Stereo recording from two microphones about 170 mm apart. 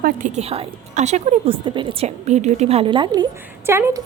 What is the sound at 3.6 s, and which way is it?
Speech, 15° right (ahead or behind).